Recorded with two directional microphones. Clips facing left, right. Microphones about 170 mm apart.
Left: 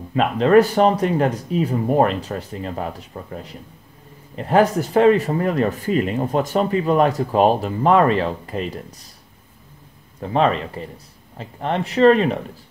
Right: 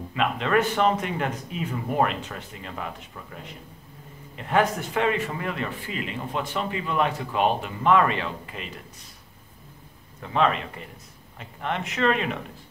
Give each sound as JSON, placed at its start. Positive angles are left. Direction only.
{"t": 0.1, "sound": "speech", "side_deg": 40}
{"t": 10.2, "sound": "speech", "side_deg": 35}